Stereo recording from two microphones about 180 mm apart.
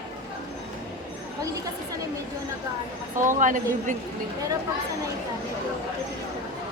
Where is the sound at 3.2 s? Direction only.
45° right (ahead or behind).